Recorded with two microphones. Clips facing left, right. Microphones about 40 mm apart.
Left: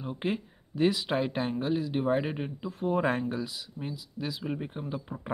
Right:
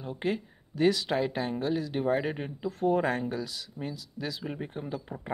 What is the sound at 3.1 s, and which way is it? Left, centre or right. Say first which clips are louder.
Speech: left 1 dB; left.